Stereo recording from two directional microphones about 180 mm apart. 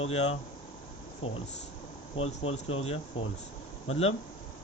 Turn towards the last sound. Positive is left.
turn(degrees=35)  # may be behind; listen again after turning